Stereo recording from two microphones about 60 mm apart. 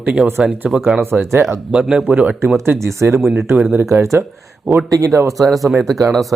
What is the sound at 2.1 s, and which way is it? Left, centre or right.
Speech, right.